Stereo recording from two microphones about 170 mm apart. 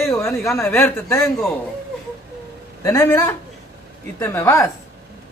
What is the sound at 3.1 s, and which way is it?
Speech, 20° left (ahead or behind).